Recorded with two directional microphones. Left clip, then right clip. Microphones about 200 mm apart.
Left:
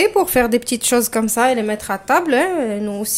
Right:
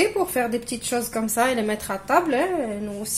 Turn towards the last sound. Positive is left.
turn(degrees=45)  # may be behind; listen again after turning